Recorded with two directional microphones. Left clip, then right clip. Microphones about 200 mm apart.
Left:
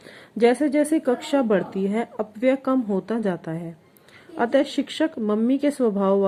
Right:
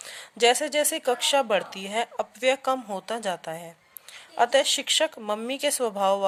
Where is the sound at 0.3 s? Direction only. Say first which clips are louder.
Left 2 dB; 30° right (ahead or behind).